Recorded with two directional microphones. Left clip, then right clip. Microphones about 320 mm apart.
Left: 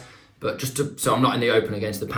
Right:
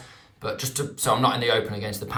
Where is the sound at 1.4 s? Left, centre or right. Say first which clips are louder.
Left 3 dB; right.